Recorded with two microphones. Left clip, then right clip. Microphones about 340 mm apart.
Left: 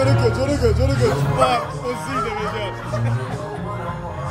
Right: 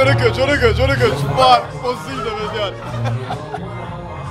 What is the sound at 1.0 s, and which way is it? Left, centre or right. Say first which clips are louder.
Speech: right 4 dB; right.